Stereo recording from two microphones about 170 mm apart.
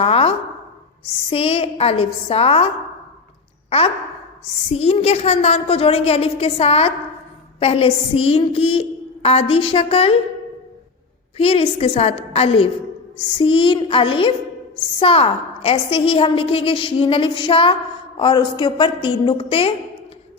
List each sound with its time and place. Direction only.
0.0 s a sound: 35° left (ahead or behind)
1.3 s a woman's voice: 35° left (ahead or behind)
3.7 s a woman's voice: 35° left (ahead or behind)
11.3 s a woman's voice: 35° left (ahead or behind)